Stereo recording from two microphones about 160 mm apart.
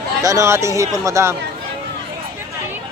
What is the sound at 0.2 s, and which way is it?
Speech, 20° right (ahead or behind).